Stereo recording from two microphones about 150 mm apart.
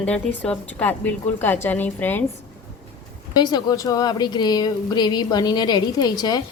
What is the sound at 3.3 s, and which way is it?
Speech, 30° left (ahead or behind).